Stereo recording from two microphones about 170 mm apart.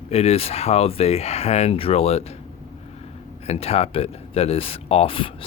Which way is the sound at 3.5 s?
35° left (ahead or behind).